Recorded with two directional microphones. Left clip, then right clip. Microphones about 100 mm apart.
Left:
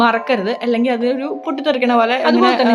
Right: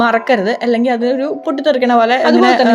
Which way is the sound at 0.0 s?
45° right (ahead or behind).